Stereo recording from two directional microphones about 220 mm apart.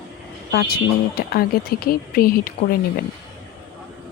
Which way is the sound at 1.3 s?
45° left (ahead or behind).